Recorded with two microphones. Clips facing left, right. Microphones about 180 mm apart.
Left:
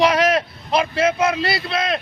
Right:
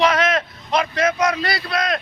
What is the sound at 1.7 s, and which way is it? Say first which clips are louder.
Speech: right 2 dB; 25° left (ahead or behind).